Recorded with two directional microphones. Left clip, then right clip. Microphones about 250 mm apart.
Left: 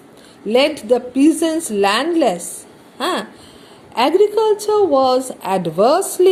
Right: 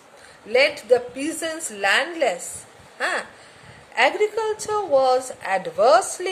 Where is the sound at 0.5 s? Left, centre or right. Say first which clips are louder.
Left 3 dB; centre.